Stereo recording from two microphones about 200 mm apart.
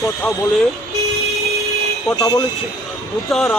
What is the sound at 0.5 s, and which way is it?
Speech, centre (ahead or behind).